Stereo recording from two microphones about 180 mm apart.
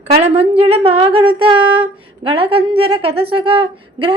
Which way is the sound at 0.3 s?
30° right (ahead or behind).